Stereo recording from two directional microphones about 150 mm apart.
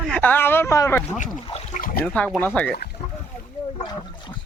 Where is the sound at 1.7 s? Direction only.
70° left (ahead or behind).